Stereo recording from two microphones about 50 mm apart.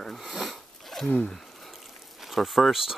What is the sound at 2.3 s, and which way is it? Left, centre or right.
Speech, centre.